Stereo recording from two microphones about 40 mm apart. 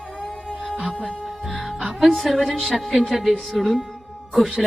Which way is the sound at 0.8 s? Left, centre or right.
Centre.